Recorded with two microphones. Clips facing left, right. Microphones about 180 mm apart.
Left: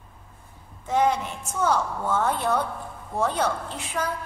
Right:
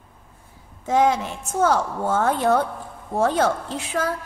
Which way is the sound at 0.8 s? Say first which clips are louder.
Right 3 dB; 90° right.